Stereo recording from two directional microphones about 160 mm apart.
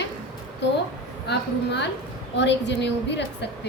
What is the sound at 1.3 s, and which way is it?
A woman's voice, 90° left.